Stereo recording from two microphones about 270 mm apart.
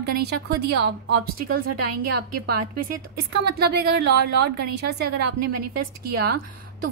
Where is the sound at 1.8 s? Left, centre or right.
Right.